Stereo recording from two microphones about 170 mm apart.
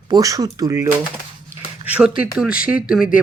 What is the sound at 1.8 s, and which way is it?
Speech, 10° right (ahead or behind).